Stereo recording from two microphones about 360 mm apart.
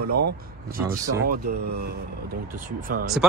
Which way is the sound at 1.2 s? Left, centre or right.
Right.